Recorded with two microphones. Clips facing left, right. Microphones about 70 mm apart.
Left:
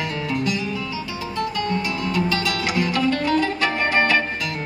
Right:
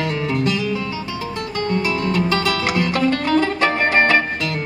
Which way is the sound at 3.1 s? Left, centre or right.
Right.